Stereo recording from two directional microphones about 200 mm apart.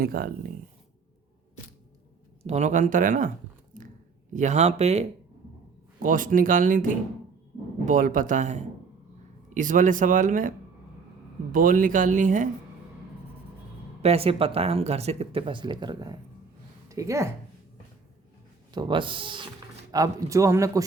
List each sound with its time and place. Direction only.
0.0 s speech: 45° right (ahead or behind)
2.4 s speech: 35° right (ahead or behind)
3.8 s a sound: 40° right (ahead or behind)
6.0 s speech: 40° right (ahead or behind)
11.5 s speech: 45° right (ahead or behind)
14.0 s speech: 30° right (ahead or behind)
18.7 s speech: 20° right (ahead or behind)